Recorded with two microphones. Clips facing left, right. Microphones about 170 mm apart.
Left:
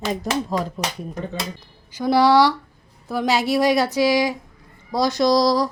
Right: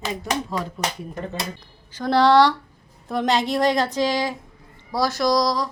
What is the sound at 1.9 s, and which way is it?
A woman's voice, 10° left (ahead or behind).